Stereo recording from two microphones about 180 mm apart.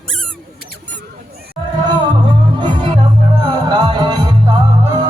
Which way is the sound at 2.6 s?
25° right (ahead or behind).